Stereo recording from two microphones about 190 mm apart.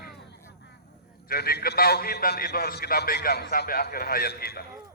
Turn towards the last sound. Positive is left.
turn(degrees=55)  # may be behind; listen again after turning